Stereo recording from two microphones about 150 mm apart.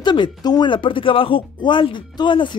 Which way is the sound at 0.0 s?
30° left (ahead or behind).